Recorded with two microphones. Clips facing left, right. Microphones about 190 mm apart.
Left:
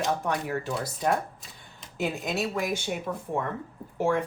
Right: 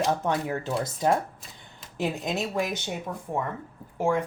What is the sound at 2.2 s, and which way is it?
Speech, 20° right (ahead or behind).